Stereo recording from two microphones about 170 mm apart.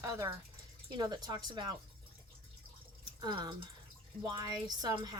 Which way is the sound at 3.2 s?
25° right (ahead or behind).